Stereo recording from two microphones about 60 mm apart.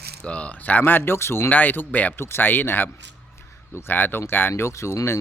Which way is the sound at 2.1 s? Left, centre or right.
Left.